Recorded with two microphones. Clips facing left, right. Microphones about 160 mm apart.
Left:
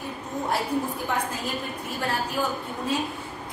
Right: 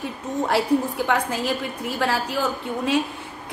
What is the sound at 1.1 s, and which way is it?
A woman's voice, 90° right.